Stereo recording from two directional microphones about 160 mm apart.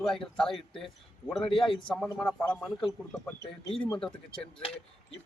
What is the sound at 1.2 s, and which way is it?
Speech, 25° left (ahead or behind).